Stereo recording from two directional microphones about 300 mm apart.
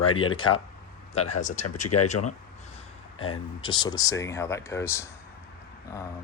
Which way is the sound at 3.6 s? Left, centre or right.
Centre.